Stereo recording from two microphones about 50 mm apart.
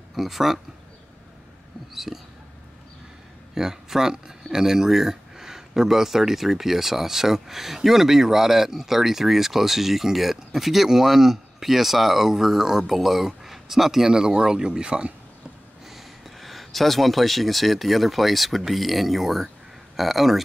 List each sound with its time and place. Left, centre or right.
0.1 s speech: centre
2.1 s a sound: centre
3.5 s speech: centre
15.9 s speech: centre